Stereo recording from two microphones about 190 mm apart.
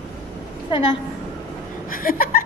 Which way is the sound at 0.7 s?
25° left (ahead or behind).